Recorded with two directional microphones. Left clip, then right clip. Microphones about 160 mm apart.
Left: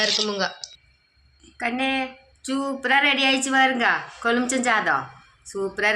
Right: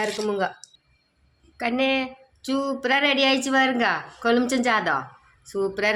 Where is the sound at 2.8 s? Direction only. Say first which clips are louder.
Left 2 dB; 90° right.